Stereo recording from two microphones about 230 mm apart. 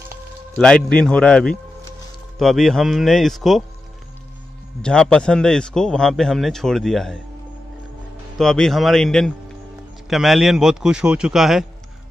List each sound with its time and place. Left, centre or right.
0.6 s speech: centre
4.8 s speech: centre
8.4 s speech: centre